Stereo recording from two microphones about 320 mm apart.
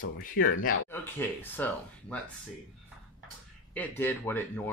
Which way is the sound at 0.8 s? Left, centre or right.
Centre.